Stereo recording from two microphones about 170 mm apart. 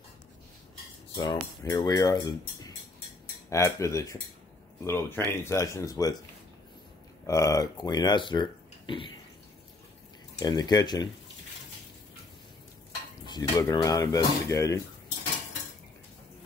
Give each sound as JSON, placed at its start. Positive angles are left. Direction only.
{"t": 1.1, "sound": "speech", "side_deg": 25}
{"t": 7.2, "sound": "speech", "side_deg": 20}
{"t": 10.4, "sound": "speech", "side_deg": 25}
{"t": 13.2, "sound": "speech", "side_deg": 25}